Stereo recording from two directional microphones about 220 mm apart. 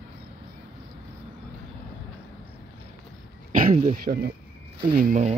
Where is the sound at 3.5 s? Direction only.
40° right (ahead or behind).